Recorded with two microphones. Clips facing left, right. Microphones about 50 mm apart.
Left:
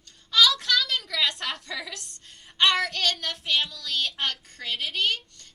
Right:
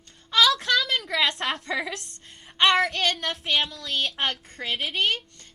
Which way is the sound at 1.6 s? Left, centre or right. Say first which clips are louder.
Right 6 dB; right.